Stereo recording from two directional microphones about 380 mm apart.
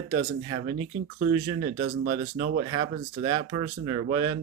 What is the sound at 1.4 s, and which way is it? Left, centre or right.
Speech, right.